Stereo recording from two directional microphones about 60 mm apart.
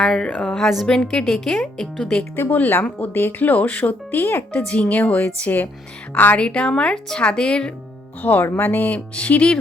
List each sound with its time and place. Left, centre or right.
0.0 s a woman's voice: centre
2.3 s a woman's voice: left
4.1 s speech: left
4.5 s a woman's voice: left
8.2 s a woman's voice: left